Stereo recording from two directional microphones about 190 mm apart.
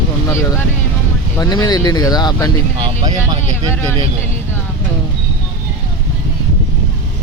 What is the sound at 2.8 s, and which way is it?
Speech, 20° right (ahead or behind).